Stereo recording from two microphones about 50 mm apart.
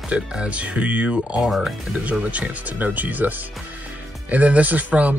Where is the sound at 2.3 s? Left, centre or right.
Right.